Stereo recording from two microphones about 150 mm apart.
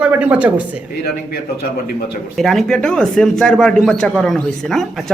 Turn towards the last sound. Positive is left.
turn(degrees=0)  # may be behind; listen again after turning